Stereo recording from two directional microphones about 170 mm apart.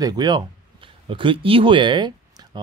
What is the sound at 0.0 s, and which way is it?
Speech, 25° right (ahead or behind).